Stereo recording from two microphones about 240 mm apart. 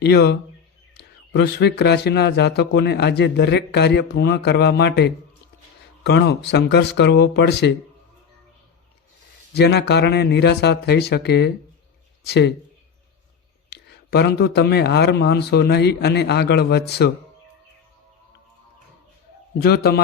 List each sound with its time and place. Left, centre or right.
0.0 s a man's voice: left
9.6 s a man's voice: left
13.7 s a man's voice: left
19.6 s a man's voice: left